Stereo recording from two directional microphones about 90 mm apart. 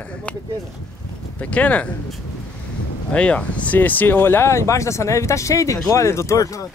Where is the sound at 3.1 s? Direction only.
15° left (ahead or behind); by 6.6 s 35° left (ahead or behind).